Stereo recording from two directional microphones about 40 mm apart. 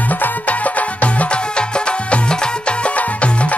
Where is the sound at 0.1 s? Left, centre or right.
Left.